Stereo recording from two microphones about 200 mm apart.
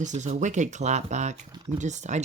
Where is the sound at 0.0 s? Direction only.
35° right (ahead or behind).